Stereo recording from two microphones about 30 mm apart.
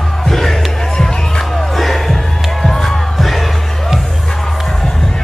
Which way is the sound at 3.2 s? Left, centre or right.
Centre.